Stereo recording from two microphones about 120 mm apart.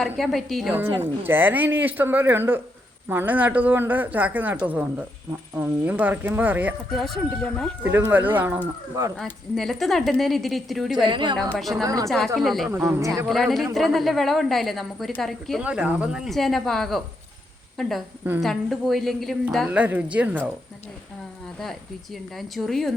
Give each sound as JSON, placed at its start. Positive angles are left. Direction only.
{"t": 0.0, "sound": "a woman's voice", "side_deg": 0}
{"t": 0.7, "sound": "speech", "side_deg": -15}
{"t": 6.9, "sound": "a woman's voice", "side_deg": 0}
{"t": 7.9, "sound": "speech", "side_deg": -15}
{"t": 9.6, "sound": "a woman's voice", "side_deg": 0}
{"t": 11.0, "sound": "a woman's voice", "side_deg": -40}
{"t": 11.3, "sound": "a woman's voice", "side_deg": 0}
{"t": 15.6, "sound": "a woman's voice", "side_deg": -10}
{"t": 19.7, "sound": "speech", "side_deg": -10}
{"t": 21.6, "sound": "a woman's voice", "side_deg": 0}